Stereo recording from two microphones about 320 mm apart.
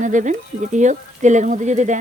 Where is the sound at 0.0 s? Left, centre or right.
Right.